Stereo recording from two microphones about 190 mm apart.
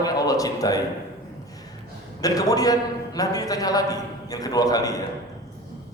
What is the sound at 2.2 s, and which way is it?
A man's voice, 20° left (ahead or behind).